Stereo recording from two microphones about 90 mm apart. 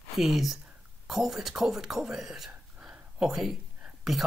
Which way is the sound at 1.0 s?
5° right (ahead or behind).